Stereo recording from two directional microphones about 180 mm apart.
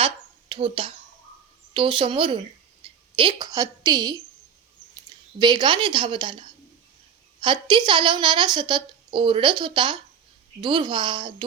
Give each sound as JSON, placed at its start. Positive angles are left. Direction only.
{"t": 0.0, "sound": "a sound", "side_deg": -30}
{"t": 1.7, "sound": "a woman's voice", "side_deg": -30}
{"t": 5.4, "sound": "a woman's voice", "side_deg": -25}
{"t": 7.4, "sound": "a woman's voice", "side_deg": -25}